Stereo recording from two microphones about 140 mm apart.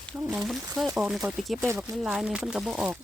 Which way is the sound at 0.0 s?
Centre (ahead or behind).